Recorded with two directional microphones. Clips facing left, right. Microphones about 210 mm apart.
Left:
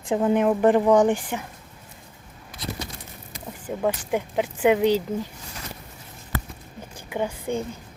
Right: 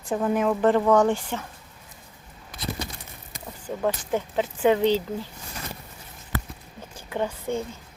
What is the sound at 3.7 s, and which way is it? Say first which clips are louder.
Speech: left 1 dB; 10° left (ahead or behind).